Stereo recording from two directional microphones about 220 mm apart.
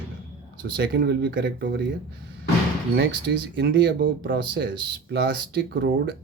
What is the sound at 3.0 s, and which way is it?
Speech, 50° right (ahead or behind).